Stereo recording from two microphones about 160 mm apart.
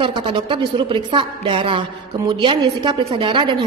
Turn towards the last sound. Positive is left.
turn(degrees=-30)  # may be behind; listen again after turning